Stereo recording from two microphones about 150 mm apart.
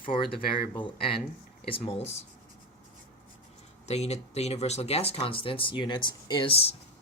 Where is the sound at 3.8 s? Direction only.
45° left (ahead or behind).